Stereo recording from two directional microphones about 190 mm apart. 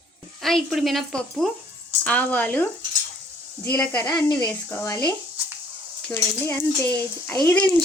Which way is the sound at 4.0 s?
20° left (ahead or behind).